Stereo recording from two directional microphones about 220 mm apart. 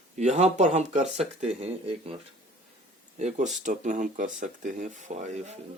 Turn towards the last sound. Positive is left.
turn(degrees=-30)  # may be behind; listen again after turning